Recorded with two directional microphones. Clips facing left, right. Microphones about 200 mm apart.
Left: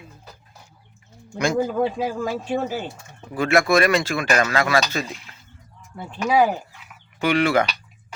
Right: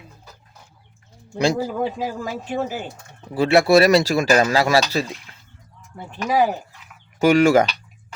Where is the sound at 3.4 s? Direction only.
30° right (ahead or behind).